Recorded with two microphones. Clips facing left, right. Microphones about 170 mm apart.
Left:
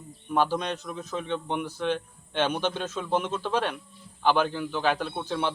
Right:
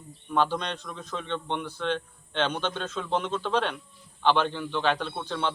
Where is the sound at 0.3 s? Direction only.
5° left (ahead or behind).